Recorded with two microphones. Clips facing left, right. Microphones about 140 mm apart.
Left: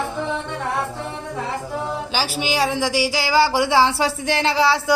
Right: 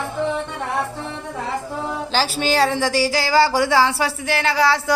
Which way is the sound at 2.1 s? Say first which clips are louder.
Right 4 dB; 10° left (ahead or behind).